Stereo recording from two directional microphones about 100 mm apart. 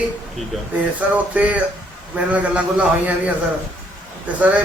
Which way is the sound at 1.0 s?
15° right (ahead or behind).